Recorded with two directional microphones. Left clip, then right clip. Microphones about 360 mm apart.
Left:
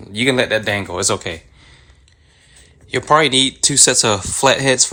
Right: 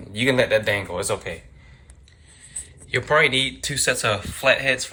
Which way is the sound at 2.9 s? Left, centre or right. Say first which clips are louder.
Left 5 dB; centre.